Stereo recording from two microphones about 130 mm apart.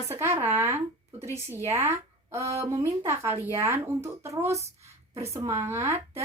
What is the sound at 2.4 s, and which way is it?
Speech, 55° right (ahead or behind).